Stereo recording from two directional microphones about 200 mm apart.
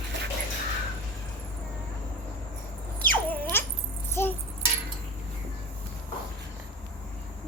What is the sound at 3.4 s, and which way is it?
Dog, 10° left (ahead or behind).